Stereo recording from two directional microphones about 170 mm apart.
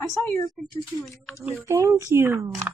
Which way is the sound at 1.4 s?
15° right (ahead or behind).